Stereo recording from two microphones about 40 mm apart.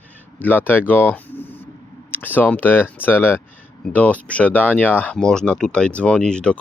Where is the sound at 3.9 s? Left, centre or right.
Left.